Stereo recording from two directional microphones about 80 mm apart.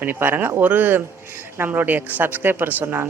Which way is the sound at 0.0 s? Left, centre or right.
Right.